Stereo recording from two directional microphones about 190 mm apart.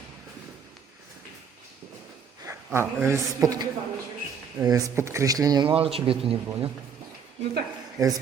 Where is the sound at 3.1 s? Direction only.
20° right (ahead or behind).